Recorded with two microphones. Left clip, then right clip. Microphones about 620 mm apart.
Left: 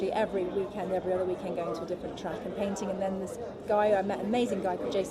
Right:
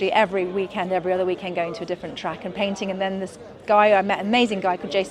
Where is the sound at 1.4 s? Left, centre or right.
Right.